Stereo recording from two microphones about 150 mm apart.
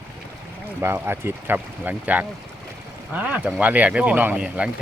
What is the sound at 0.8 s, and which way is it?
Speech, 15° right (ahead or behind).